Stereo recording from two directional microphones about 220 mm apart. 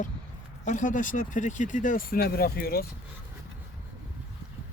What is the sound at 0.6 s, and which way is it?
Speech, 35° left (ahead or behind).